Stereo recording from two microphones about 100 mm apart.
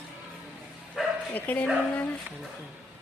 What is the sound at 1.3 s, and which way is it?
Speech, 15° left (ahead or behind).